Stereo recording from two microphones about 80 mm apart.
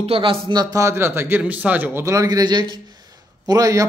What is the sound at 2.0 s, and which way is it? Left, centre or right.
Speech, right.